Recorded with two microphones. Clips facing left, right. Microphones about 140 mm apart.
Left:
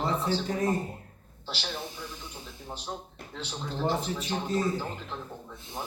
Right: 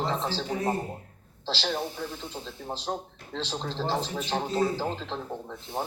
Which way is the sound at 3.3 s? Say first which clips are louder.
Right 4 dB; 85° right.